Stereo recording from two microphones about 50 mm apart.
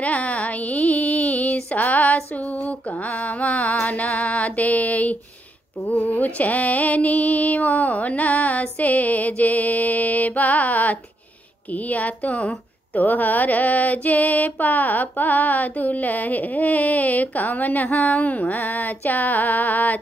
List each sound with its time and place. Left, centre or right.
0.0 s a sound: left
3.8 s music: left
6.2 s a woman's voice: left